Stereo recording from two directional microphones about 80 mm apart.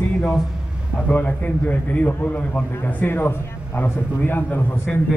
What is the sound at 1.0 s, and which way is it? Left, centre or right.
A man's voice, left.